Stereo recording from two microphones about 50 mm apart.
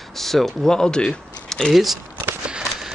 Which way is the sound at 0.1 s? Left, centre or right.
Centre.